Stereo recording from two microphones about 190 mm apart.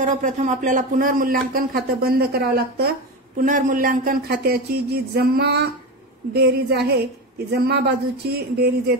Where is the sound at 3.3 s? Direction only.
45° right (ahead or behind).